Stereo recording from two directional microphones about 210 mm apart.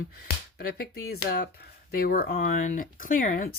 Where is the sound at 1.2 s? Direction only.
45° left (ahead or behind).